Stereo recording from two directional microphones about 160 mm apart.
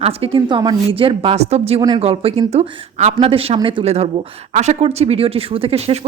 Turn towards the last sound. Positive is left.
turn(degrees=-40)  # may be behind; listen again after turning